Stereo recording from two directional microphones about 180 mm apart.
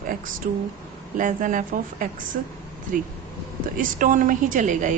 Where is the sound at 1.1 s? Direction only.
45° right (ahead or behind).